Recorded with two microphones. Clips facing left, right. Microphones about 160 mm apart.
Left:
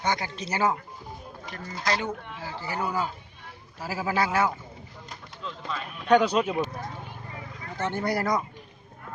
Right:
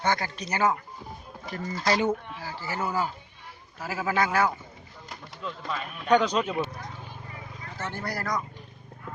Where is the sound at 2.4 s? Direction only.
20° left (ahead or behind).